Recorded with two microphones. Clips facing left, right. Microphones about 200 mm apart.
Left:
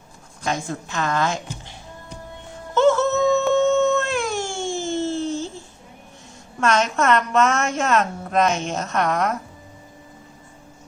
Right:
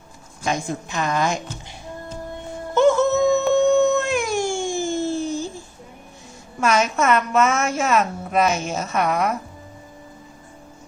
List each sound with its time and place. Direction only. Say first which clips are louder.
0.4 s a woman's voice: right 1 dB; 15° right (ahead or behind)
2.7 s a sound: right 1 dB; 15° right (ahead or behind)
6.6 s a woman's voice: even; 5° right (ahead or behind)